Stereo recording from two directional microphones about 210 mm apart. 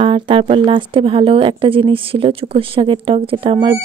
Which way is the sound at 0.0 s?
25° right (ahead or behind).